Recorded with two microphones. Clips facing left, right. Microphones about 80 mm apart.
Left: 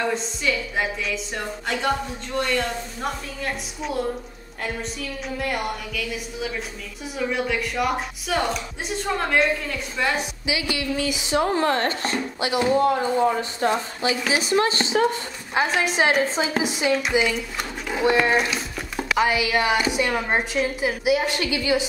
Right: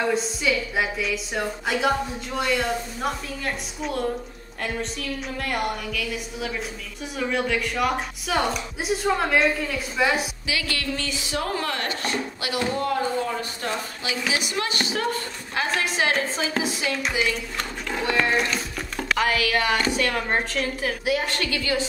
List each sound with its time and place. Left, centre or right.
0.1 s a woman's voice: centre
5.4 s a woman's voice: centre
10.4 s a woman's voice: centre